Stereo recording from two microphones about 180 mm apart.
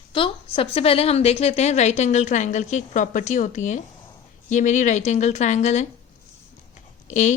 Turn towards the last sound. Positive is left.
turn(degrees=45)  # may be behind; listen again after turning